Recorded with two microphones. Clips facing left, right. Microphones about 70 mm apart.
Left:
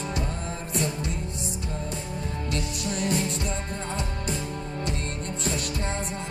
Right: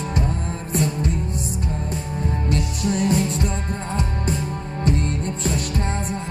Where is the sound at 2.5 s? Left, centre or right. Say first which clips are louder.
Right 7 dB; right.